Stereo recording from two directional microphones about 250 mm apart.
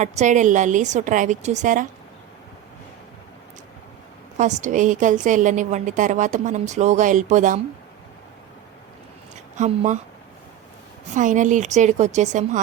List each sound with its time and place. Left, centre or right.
0.0 s a woman's voice: right
4.4 s a woman's voice: right
9.3 s a woman's voice: right
11.1 s a woman's voice: right